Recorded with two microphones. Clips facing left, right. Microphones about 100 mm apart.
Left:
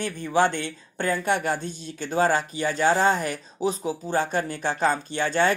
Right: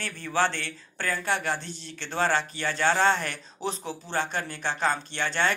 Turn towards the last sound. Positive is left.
turn(degrees=15)  # may be behind; listen again after turning